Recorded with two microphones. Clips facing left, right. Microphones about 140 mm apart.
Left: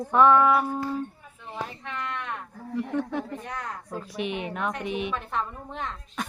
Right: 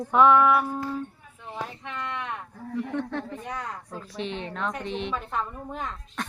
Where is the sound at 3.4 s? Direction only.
5° right (ahead or behind).